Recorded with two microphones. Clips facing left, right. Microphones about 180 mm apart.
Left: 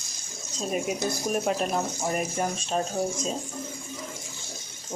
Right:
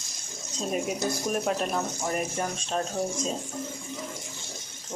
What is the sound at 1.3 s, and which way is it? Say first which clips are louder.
Speech: left 4 dB; 5° left (ahead or behind).